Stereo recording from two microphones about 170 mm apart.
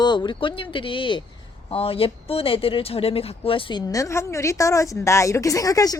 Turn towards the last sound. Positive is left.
turn(degrees=20)  # may be behind; listen again after turning